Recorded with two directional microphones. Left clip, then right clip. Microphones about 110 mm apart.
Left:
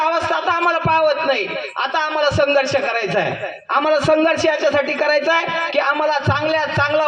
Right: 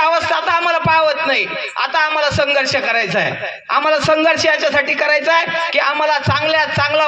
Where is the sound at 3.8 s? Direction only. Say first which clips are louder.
Right 2 dB; 50° left (ahead or behind).